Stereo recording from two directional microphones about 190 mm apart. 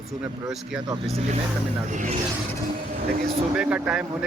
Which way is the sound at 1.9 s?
40° right (ahead or behind).